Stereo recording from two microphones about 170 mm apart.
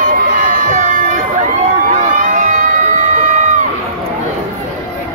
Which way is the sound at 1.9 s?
50° right (ahead or behind).